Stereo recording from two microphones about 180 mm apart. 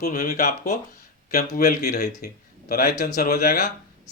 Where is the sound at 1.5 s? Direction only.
50° left (ahead or behind).